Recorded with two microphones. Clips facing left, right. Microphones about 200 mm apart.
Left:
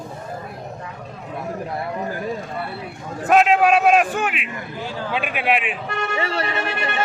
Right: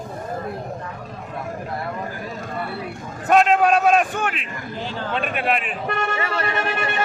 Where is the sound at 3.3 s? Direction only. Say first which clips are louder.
Left 1 dB; 5° left (ahead or behind).